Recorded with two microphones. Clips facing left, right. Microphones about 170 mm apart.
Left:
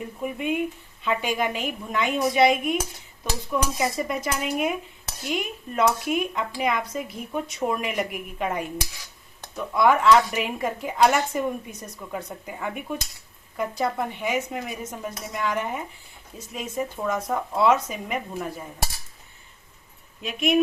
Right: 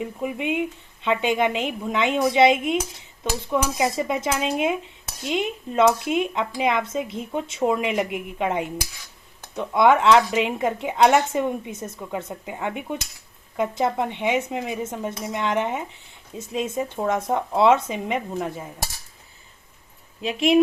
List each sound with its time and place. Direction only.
0.0 s speech: 20° right (ahead or behind)
20.2 s speech: 30° right (ahead or behind)